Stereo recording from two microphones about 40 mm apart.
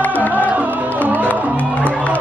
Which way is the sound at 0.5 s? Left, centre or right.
Right.